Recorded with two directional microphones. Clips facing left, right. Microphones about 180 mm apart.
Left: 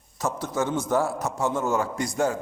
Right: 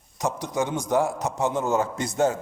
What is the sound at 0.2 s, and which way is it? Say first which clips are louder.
A man's voice: right 1 dB; 15° right (ahead or behind).